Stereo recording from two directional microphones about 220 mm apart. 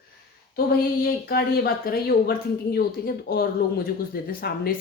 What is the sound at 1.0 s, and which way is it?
Speech, 45° left (ahead or behind).